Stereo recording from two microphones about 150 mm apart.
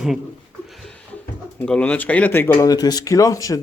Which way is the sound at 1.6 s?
5° left (ahead or behind).